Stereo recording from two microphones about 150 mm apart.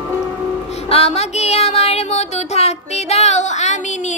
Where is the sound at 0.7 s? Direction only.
45° left (ahead or behind).